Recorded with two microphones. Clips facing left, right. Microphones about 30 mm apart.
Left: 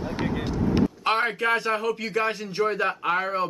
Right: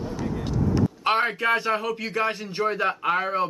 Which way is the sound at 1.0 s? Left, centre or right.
Centre.